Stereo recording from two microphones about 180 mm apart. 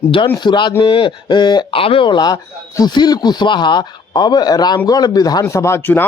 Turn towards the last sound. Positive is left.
turn(degrees=15)  # may be behind; listen again after turning